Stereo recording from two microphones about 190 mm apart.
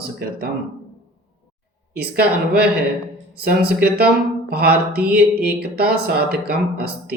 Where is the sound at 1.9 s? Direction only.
55° right (ahead or behind).